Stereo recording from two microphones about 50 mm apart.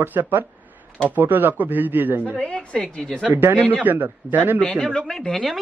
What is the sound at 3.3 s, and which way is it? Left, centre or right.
Speech, right.